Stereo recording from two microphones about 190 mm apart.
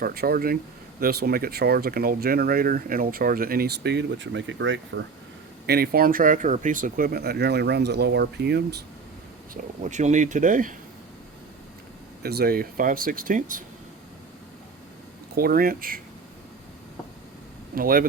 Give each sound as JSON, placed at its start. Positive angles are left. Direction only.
{"t": 0.0, "sound": "speech", "side_deg": -55}
{"t": 5.6, "sound": "speech", "side_deg": -55}
{"t": 9.8, "sound": "speech", "side_deg": -40}
{"t": 12.2, "sound": "speech", "side_deg": -55}
{"t": 15.4, "sound": "speech", "side_deg": -50}
{"t": 17.7, "sound": "speech", "side_deg": -50}